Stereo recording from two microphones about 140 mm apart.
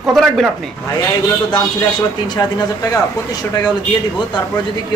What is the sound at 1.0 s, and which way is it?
Speech, 30° left (ahead or behind).